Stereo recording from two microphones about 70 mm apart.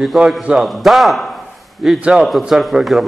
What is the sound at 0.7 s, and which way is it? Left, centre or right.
A man's voice, centre.